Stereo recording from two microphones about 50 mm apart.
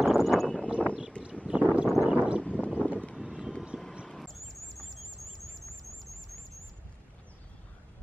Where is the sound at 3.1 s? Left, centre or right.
Centre.